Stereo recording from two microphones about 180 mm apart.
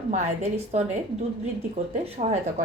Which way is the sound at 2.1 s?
40° right (ahead or behind).